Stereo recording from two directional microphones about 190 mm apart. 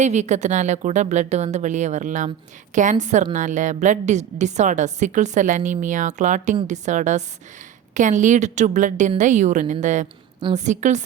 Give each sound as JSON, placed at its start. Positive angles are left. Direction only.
{"t": 0.0, "sound": "a woman's voice", "side_deg": -40}